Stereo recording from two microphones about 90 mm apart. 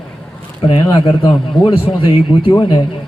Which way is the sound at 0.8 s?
55° left (ahead or behind).